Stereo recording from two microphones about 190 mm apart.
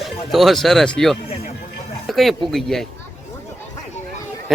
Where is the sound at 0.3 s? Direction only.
Centre (ahead or behind).